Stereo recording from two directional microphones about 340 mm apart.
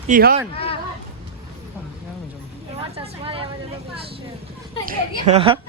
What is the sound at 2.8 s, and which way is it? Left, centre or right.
Speech, centre.